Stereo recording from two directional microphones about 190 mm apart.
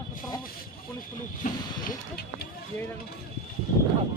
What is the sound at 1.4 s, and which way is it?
Speech, 45° left (ahead or behind).